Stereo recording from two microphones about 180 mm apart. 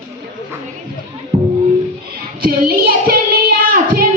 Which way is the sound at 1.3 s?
35° right (ahead or behind).